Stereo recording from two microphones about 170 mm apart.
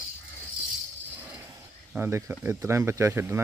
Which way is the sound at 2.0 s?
10° right (ahead or behind).